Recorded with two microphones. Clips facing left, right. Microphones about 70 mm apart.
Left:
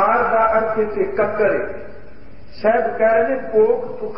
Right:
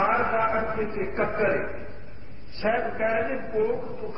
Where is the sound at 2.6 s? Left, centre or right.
Left.